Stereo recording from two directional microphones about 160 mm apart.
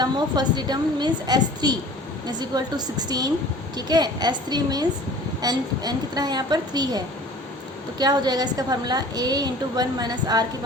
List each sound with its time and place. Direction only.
0.0 s a woman's voice: 25° right (ahead or behind)